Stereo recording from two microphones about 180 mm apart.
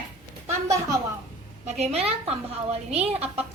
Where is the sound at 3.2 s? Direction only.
10° right (ahead or behind).